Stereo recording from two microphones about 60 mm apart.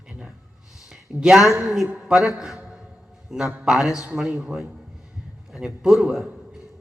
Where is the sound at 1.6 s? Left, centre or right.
Centre.